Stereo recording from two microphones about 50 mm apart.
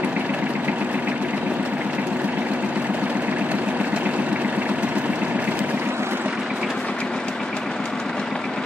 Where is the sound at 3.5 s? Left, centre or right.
Right.